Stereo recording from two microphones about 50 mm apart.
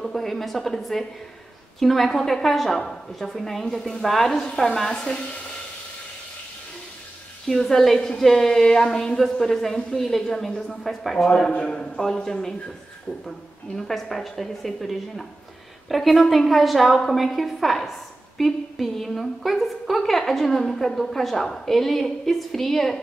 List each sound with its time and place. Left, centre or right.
0.0 s a woman's voice: centre
7.4 s a woman's voice: centre
11.5 s a man's voice: left
13.7 s a woman's voice: centre